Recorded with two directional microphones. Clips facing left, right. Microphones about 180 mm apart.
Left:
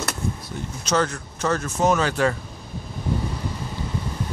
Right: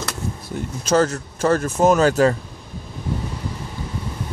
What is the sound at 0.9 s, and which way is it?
Speech, 40° right (ahead or behind).